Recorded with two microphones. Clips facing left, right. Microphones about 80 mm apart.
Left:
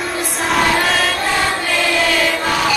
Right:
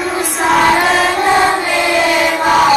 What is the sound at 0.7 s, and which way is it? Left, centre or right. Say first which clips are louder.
Choir: right 5 dB; centre.